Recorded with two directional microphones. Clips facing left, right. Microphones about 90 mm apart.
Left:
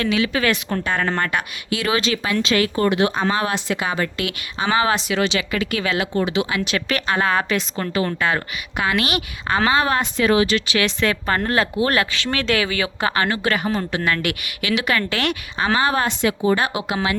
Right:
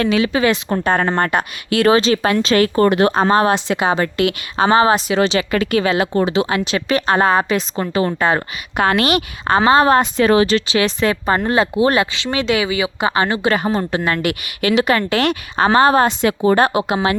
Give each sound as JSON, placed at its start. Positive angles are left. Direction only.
{"t": 0.0, "sound": "speech", "side_deg": -35}
{"t": 4.2, "sound": "speech", "side_deg": -45}
{"t": 13.6, "sound": "speech", "side_deg": -35}